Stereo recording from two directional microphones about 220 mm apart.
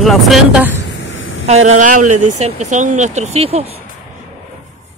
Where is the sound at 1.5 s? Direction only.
30° right (ahead or behind).